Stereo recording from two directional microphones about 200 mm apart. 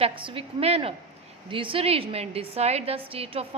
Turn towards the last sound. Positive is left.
turn(degrees=-30)  # may be behind; listen again after turning